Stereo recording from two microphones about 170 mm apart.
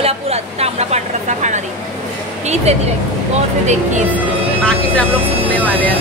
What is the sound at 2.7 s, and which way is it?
Speech, 40° right (ahead or behind).